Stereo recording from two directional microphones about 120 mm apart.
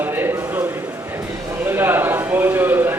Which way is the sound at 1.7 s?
20° right (ahead or behind).